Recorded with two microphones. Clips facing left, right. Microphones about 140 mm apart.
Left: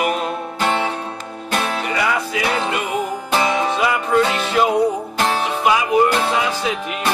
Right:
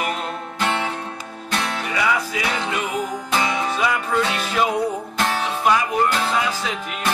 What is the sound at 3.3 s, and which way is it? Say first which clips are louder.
Music: left 4 dB; 30° left (ahead or behind).